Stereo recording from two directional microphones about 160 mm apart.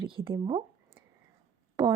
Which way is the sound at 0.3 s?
30° right (ahead or behind).